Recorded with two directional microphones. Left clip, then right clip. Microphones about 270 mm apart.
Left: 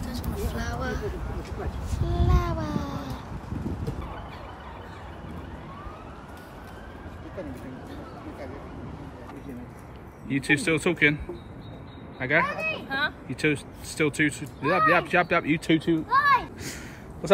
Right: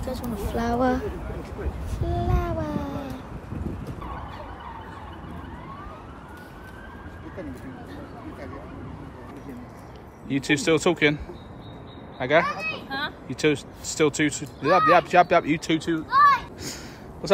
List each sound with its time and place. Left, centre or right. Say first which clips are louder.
0.0 s speech: right 3 dB; centre
2.0 s a sound: right 2 dB; centre
10.2 s speech: right 1 dB; centre
12.2 s speech: right 3 dB; centre
12.4 s speech: right 1 dB; left
12.9 s speech: left 2 dB; centre
16.1 s a sound: right 4 dB; left